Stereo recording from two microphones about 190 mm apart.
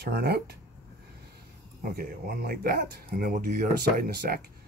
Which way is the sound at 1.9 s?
55° right (ahead or behind).